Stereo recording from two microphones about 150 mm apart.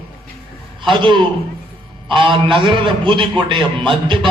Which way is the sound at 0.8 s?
35° right (ahead or behind).